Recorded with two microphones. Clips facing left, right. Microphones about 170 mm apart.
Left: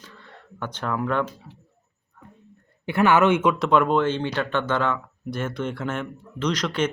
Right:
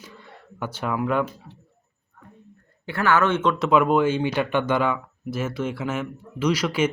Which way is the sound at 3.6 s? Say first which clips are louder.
Right 1 dB; 5° right (ahead or behind).